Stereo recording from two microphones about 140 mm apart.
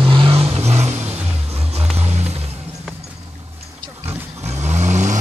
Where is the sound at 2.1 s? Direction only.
50° right (ahead or behind).